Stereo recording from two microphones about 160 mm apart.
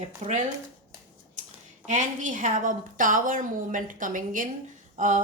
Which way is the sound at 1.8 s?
50° right (ahead or behind).